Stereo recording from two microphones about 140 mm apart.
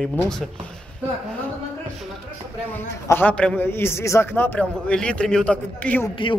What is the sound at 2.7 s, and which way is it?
A man's voice, 15° left (ahead or behind).